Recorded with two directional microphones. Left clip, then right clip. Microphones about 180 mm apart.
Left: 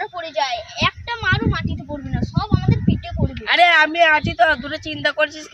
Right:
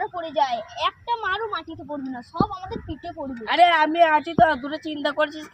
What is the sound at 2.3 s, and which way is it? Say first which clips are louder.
Speech: left 1 dB; 15° left (ahead or behind).